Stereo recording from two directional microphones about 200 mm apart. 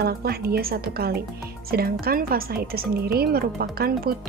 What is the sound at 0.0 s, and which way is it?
Speech, 50° right (ahead or behind).